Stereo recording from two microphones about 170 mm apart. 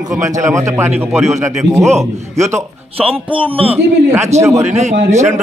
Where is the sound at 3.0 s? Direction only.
30° right (ahead or behind).